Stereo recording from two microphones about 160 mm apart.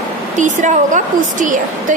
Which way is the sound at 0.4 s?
50° right (ahead or behind).